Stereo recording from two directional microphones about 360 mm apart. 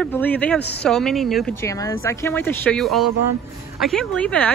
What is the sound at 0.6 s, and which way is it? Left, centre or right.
Speech, left.